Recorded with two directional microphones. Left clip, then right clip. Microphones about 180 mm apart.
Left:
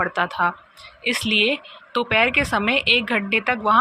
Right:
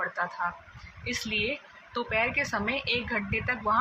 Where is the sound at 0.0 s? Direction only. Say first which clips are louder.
Left 10 dB; 50° left (ahead or behind).